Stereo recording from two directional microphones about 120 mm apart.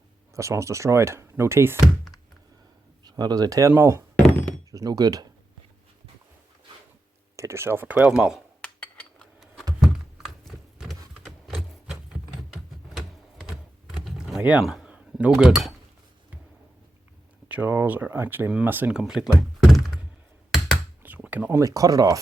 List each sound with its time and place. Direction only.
0.3 s speech: 25° right (ahead or behind)
3.0 s speech: 35° right (ahead or behind)
7.3 s speech: 25° right (ahead or behind)
8.6 s dishes: 10° left (ahead or behind)
9.8 s a sound: centre (ahead or behind)
14.0 s a sound: centre (ahead or behind)
17.5 s speech: 15° right (ahead or behind)
21.0 s a sound: 15° right (ahead or behind)
21.6 s speech: 30° right (ahead or behind)